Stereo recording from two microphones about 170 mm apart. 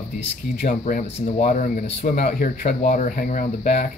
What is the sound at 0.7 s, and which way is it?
Speech, 55° left (ahead or behind).